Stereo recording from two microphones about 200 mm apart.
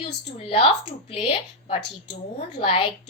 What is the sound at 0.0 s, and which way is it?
A woman's voice, 30° left (ahead or behind).